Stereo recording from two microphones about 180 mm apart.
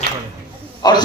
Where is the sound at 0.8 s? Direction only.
25° left (ahead or behind).